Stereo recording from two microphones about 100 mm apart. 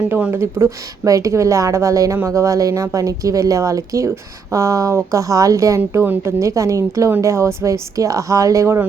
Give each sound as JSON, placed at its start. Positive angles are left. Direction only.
{"t": 0.1, "sound": "speech", "side_deg": -20}